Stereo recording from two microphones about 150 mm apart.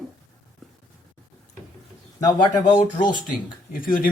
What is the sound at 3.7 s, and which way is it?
Speech, 70° left (ahead or behind).